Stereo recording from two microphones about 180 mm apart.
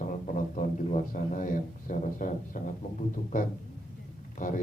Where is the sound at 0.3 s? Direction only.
45° left (ahead or behind).